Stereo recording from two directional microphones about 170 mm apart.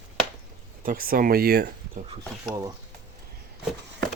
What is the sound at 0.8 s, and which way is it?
Speech, 60° right (ahead or behind).